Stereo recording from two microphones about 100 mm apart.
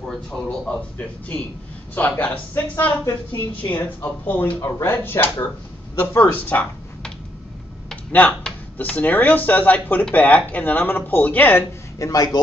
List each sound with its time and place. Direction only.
0.7 s speech: 10° left (ahead or behind)
7.9 s typing: 15° left (ahead or behind)
8.7 s speech: 15° left (ahead or behind)
12.0 s speech: 40° left (ahead or behind)